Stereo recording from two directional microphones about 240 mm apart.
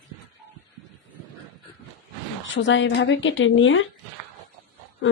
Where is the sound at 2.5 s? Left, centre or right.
Left.